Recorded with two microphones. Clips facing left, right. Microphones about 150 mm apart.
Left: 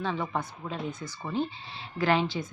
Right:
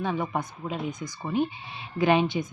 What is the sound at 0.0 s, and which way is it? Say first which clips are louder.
A woman's voice: right 3 dB; 15° right (ahead or behind).